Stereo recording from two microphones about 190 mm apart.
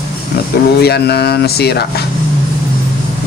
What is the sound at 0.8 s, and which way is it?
Speech, 60° left (ahead or behind).